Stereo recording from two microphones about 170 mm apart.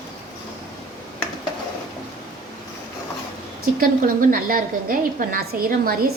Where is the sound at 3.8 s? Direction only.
55° right (ahead or behind).